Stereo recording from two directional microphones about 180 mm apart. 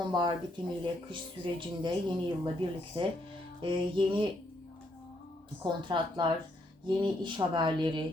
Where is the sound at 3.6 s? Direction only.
30° right (ahead or behind).